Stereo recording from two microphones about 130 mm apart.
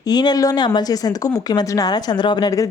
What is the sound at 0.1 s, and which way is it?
A woman's voice, 30° left (ahead or behind).